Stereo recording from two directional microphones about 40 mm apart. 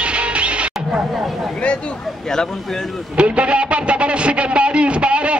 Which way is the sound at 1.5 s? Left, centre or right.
Left.